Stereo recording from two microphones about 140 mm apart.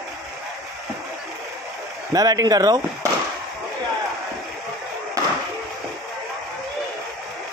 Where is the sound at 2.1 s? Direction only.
25° right (ahead or behind).